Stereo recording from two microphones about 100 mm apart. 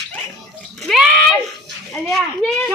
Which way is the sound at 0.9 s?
Centre (ahead or behind).